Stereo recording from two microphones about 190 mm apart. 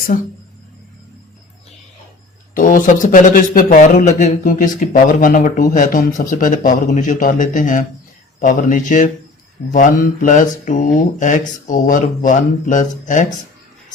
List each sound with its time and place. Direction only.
2.6 s a man's voice: 45° left (ahead or behind)